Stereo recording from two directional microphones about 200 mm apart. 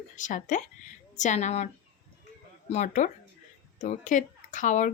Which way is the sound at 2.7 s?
35° left (ahead or behind).